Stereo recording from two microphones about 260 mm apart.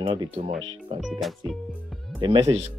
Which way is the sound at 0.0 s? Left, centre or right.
Centre.